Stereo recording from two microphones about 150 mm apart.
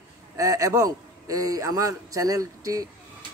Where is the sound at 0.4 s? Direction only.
25° right (ahead or behind).